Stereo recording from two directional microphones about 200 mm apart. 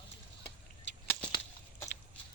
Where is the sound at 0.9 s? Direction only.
60° left (ahead or behind).